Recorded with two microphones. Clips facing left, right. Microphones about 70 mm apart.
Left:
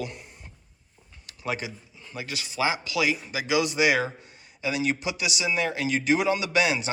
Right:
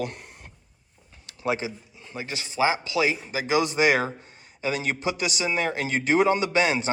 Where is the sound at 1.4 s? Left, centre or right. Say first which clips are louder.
Right 4 dB; right.